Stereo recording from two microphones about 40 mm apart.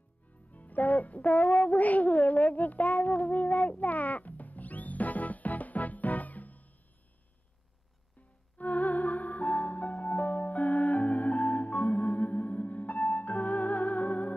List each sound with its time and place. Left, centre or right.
0.5 s music: left
8.5 s music: left